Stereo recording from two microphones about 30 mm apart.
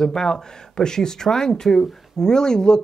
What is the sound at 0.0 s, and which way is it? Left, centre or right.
Speech, left.